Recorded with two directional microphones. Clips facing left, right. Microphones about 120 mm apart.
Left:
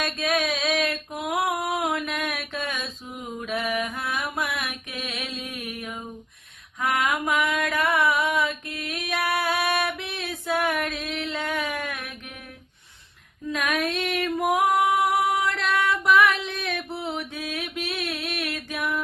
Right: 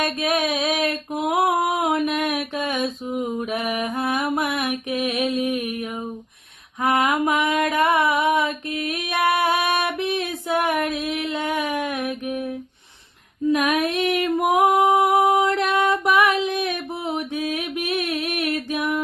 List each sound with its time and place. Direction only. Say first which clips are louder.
0.2 s a sound: right 3 dB; 20° right (ahead or behind)
3.4 s mantra: right 3 dB; 20° right (ahead or behind)
7.3 s a sound: right 4 dB; 20° right (ahead or behind)
9.2 s music: right 5 dB; 20° right (ahead or behind)
13.5 s female singing: right 6 dB; 15° right (ahead or behind)
15.2 s music: right 6 dB; 30° right (ahead or behind)
15.7 s music: left 2 dB; 20° right (ahead or behind)
18.0 s a sound: right 5 dB; 45° right (ahead or behind)
18.3 s music: right 7 dB; 20° right (ahead or behind)